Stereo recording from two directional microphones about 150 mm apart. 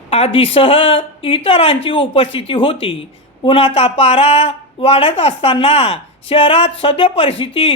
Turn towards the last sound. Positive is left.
turn(degrees=35)  # may be behind; listen again after turning